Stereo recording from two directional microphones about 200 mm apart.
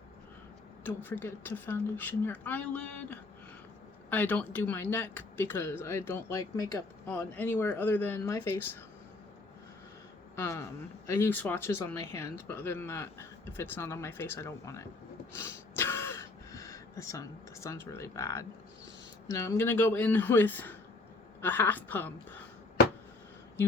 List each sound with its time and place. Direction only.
0.9 s speech: 10° left (ahead or behind)
10.3 s speech: 15° left (ahead or behind)
15.4 s a sound: 10° left (ahead or behind)
19.3 s speech: 15° left (ahead or behind)